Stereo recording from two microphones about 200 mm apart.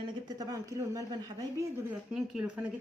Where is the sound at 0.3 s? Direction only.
20° right (ahead or behind).